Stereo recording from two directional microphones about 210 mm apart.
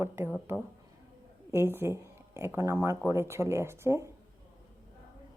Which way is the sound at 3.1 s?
10° right (ahead or behind).